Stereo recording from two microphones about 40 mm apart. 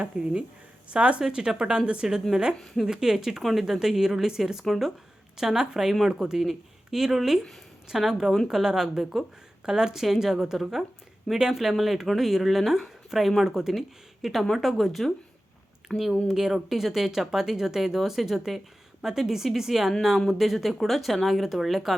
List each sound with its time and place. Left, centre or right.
0.1 s a woman's voice: right
1.3 s a woman's voice: centre
3.4 s speech: centre
4.6 s speech: centre
5.4 s speech: centre
16.3 s speech: centre